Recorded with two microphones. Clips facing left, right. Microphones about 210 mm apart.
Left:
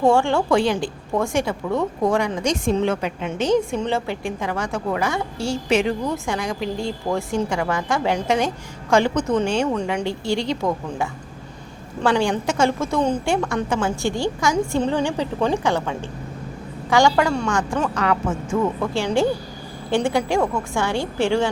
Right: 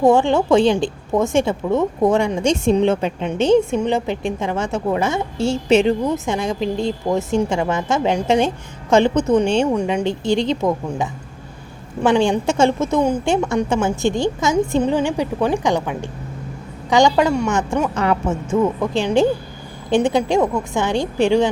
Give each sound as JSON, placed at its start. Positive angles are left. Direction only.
{"t": 0.0, "sound": "a woman's voice", "side_deg": -20}